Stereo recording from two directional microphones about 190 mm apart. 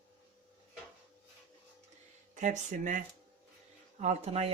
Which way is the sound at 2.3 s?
40° right (ahead or behind).